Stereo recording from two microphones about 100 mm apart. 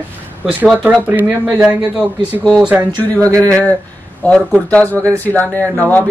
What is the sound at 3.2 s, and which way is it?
Speech, 35° right (ahead or behind).